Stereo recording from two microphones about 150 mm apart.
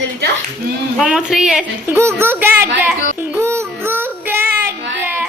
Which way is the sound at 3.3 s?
20° right (ahead or behind).